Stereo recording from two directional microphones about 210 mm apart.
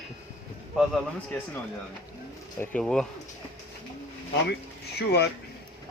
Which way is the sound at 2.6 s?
5° left (ahead or behind).